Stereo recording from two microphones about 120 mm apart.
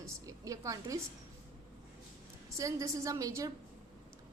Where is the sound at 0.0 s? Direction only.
25° right (ahead or behind).